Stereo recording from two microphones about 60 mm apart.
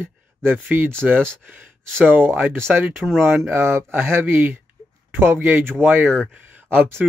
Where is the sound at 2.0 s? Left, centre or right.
Right.